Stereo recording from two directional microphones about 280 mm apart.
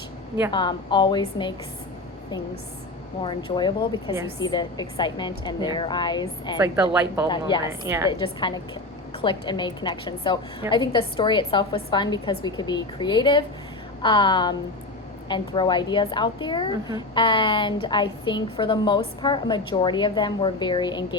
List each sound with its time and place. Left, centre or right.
0.5 s a woman's voice: centre
3.2 s a woman's voice: centre
6.9 s speech: centre
7.3 s a woman's voice: centre
7.9 s a woman's voice: centre
8.2 s a woman's voice: centre